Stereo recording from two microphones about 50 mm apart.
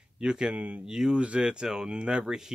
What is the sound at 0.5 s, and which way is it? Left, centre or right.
Speech, right.